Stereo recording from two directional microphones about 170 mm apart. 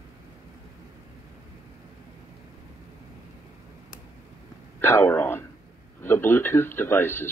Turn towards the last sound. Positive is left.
turn(degrees=15)  # may be behind; listen again after turning